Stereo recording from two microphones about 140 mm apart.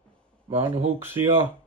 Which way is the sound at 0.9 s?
15° right (ahead or behind).